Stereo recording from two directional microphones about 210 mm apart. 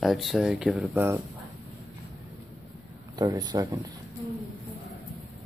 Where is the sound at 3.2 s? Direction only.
20° right (ahead or behind).